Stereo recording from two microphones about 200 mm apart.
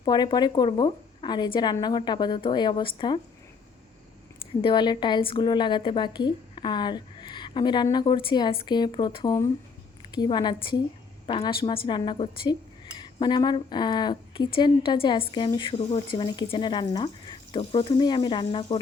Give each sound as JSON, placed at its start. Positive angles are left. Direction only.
{"t": 0.0, "sound": "a woman's voice", "side_deg": 20}
{"t": 4.6, "sound": "a woman's voice", "side_deg": 20}